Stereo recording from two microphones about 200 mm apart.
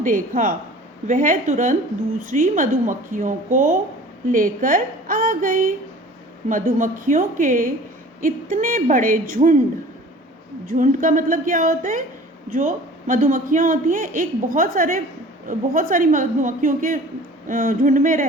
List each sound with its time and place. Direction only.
0.0 s a woman's voice: 40° right (ahead or behind)
10.7 s a man's voice: 45° right (ahead or behind)